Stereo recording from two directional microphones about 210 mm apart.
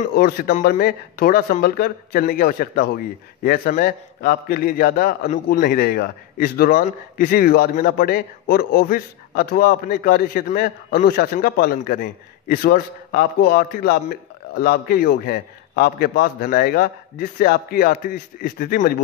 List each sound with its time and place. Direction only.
0.1 s speech: 45° left (ahead or behind)